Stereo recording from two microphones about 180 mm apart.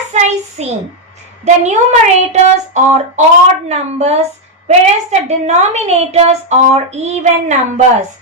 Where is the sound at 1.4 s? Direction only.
40° right (ahead or behind).